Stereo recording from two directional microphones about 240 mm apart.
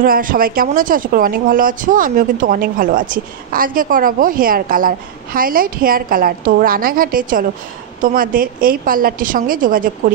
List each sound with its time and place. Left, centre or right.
0.0 s speech: right